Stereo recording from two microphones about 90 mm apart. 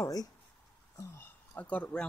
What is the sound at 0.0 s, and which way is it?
Speech, 45° left (ahead or behind).